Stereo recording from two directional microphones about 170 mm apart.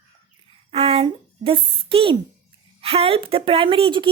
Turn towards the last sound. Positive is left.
turn(degrees=-30)  # may be behind; listen again after turning